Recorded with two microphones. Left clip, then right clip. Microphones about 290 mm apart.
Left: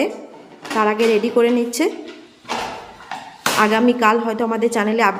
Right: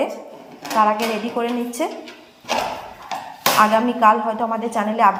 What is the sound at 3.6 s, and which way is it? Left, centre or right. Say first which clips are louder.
A woman's voice: even; centre.